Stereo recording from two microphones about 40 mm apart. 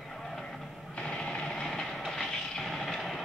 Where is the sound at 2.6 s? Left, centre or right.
Centre.